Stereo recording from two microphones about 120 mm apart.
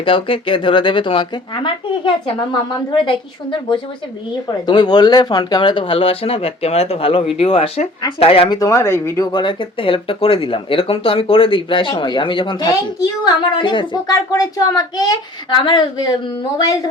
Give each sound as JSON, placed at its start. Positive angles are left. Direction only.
{"t": 0.0, "sound": "speech", "side_deg": 45}
{"t": 8.4, "sound": "speech", "side_deg": 30}